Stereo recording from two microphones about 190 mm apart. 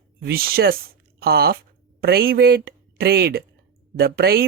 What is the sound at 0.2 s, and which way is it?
A woman's voice, 55° right (ahead or behind).